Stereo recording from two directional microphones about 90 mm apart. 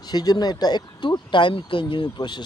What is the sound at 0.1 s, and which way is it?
Speech, 50° left (ahead or behind).